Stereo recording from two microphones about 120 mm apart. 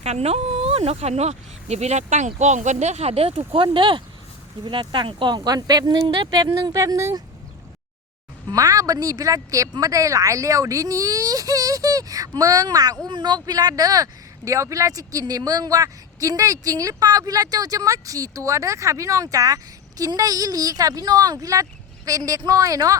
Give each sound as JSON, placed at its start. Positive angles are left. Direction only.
{"t": 0.0, "sound": "speech", "side_deg": -60}
{"t": 8.4, "sound": "speech", "side_deg": -30}